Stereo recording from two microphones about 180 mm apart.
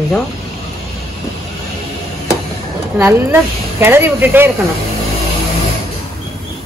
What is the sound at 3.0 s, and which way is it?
Speech, 10° right (ahead or behind).